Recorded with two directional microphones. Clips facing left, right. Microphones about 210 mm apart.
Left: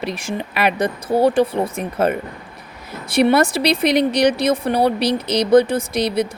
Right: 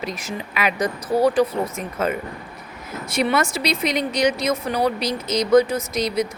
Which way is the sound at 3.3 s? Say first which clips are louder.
Left 5 dB; 35° left (ahead or behind).